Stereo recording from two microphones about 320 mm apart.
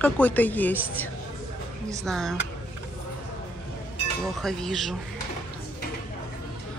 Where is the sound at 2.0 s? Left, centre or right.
Centre.